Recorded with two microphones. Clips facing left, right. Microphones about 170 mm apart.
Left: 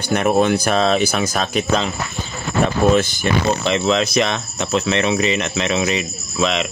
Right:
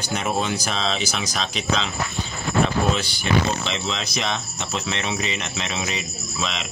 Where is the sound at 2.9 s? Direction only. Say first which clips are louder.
Left 6 dB; 45° left (ahead or behind).